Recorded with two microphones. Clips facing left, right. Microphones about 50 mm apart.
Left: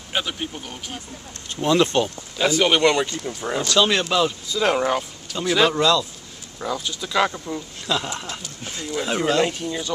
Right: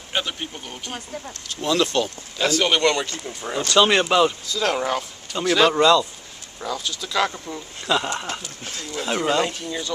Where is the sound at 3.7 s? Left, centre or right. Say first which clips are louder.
Right 3 dB; centre.